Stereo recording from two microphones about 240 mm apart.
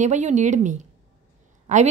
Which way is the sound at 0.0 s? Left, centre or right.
Right.